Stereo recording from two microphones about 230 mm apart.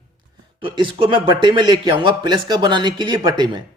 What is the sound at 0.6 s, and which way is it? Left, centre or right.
A man's voice, right.